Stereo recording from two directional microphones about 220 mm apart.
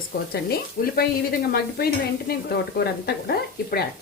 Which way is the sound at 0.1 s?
45° left (ahead or behind).